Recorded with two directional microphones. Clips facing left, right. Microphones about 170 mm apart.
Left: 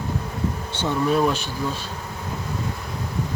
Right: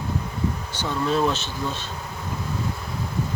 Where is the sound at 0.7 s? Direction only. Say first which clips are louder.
Left 4 dB; 25° left (ahead or behind).